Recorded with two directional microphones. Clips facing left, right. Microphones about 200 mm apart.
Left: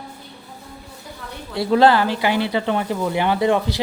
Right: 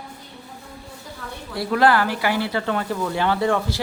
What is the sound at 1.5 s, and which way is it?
A woman's voice, 25° left (ahead or behind).